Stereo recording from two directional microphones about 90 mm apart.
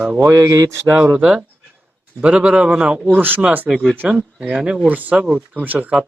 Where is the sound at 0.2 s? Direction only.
35° right (ahead or behind).